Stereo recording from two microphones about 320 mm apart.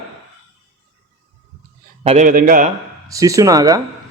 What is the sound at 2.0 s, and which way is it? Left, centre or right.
Speech, right.